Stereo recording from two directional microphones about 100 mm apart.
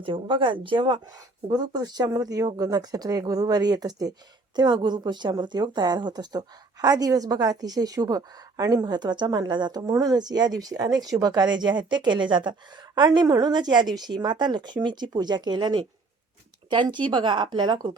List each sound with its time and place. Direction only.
0.0 s speech: 55° right (ahead or behind)
1.5 s a woman's voice: 45° right (ahead or behind)